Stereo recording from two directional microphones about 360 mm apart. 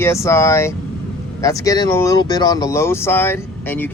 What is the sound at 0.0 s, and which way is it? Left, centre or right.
Speech, centre.